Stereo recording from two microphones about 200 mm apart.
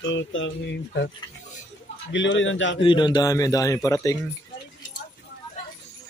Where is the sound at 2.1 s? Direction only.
65° left (ahead or behind).